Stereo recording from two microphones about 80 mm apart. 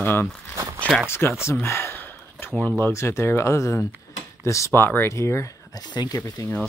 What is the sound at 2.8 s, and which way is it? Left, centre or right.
Speech, left.